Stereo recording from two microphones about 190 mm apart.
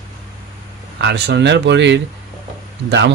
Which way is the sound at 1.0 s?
65° right (ahead or behind).